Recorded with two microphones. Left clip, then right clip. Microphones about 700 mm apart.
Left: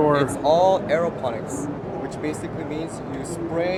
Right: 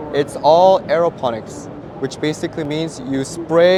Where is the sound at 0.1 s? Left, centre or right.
Right.